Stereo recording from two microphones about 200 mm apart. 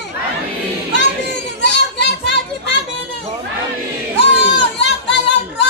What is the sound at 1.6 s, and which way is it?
Children playing, 60° left (ahead or behind).